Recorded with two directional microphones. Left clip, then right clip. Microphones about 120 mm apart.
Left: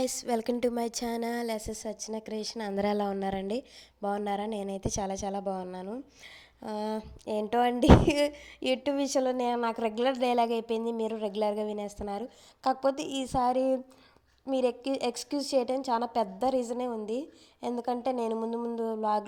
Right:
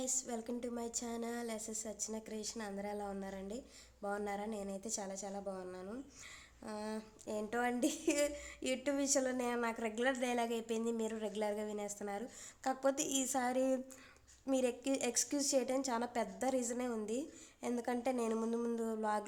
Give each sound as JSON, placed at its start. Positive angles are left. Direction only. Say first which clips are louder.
{"t": 0.0, "sound": "a woman's voice", "louder": "left 12 dB", "side_deg": 55}
{"t": 4.0, "sound": "a woman's voice", "louder": "left 9 dB", "side_deg": 60}
{"t": 6.7, "sound": "a sound", "louder": "left 10 dB", "side_deg": 60}
{"t": 14.5, "sound": "a woman's voice", "louder": "left 7 dB", "side_deg": 25}